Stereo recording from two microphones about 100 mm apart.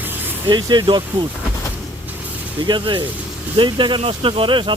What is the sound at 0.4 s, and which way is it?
Speech, 50° right (ahead or behind).